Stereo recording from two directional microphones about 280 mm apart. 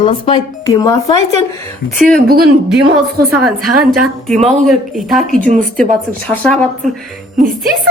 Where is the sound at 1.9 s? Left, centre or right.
Right.